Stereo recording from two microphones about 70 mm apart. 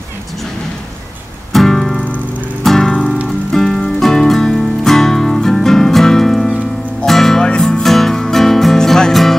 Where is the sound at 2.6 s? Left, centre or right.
Centre.